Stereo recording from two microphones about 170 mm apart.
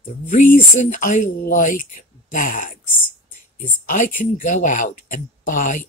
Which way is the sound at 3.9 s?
50° left (ahead or behind).